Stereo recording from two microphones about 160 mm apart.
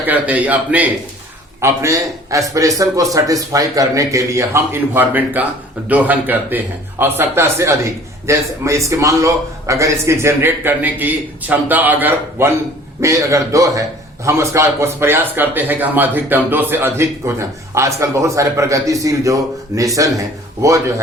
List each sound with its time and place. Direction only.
0.0 s a man's voice: 10° right (ahead or behind)